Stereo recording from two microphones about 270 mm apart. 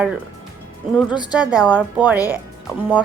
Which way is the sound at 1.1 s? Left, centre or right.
Centre.